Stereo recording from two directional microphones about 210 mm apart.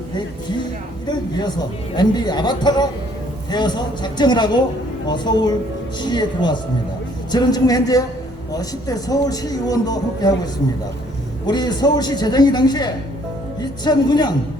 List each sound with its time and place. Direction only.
1.0 s a man's voice: 20° left (ahead or behind)